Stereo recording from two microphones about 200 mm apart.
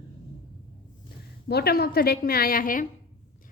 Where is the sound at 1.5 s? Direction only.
50° left (ahead or behind).